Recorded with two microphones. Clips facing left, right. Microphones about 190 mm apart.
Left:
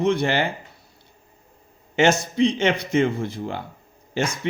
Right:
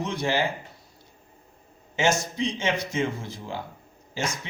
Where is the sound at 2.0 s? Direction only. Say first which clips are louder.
Left 6 dB; 60° left (ahead or behind).